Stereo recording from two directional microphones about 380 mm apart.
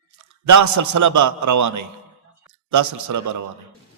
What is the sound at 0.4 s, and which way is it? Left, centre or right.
A man's voice, right.